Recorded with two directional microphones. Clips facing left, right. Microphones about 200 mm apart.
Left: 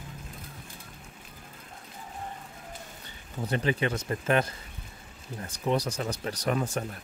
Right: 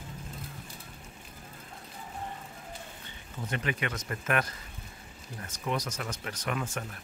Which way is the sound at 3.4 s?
30° left (ahead or behind).